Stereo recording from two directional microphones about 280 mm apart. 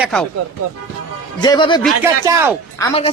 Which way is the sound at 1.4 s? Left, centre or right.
Centre.